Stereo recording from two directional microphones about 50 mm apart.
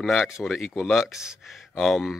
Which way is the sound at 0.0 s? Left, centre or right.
Centre.